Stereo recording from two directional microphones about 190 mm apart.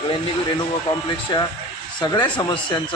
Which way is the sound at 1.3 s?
25° left (ahead or behind).